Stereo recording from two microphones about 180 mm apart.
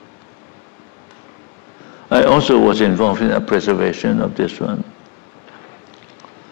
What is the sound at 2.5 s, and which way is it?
A man's voice, 15° left (ahead or behind).